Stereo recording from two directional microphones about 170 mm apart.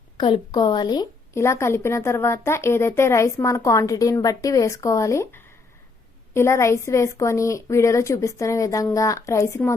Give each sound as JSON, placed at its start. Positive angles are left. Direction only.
{"t": 0.2, "sound": "speech", "side_deg": 25}